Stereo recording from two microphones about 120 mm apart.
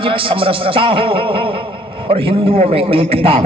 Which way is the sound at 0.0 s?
50° right (ahead or behind).